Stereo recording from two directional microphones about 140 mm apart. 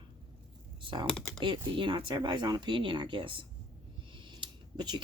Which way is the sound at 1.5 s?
35° right (ahead or behind).